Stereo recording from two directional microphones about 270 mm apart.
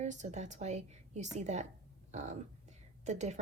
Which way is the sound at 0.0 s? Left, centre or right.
Right.